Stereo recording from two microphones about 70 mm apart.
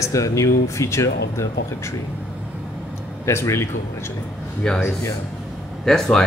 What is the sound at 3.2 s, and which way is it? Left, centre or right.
Speech, left.